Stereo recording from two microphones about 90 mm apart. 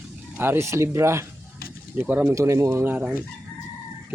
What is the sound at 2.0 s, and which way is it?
Speech, 15° right (ahead or behind).